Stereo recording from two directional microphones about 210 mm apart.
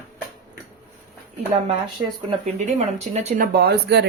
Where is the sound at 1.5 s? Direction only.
30° right (ahead or behind).